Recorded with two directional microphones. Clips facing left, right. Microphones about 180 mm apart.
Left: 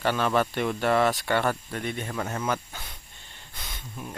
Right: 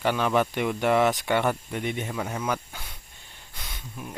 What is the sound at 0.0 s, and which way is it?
Speech, 15° right (ahead or behind).